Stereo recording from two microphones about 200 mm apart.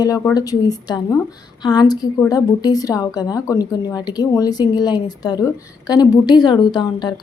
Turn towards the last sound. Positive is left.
turn(degrees=20)  # may be behind; listen again after turning